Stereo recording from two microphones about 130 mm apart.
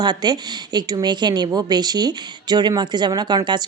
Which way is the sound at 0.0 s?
35° right (ahead or behind).